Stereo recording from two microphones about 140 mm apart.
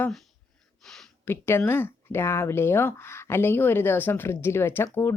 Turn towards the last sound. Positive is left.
turn(degrees=15)  # may be behind; listen again after turning